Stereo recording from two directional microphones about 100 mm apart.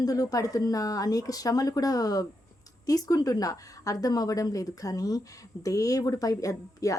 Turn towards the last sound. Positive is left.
turn(degrees=35)  # may be behind; listen again after turning